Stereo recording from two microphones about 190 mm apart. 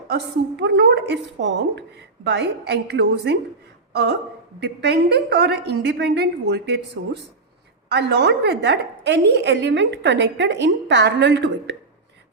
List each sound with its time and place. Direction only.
0.1 s a woman's voice: 60° right (ahead or behind)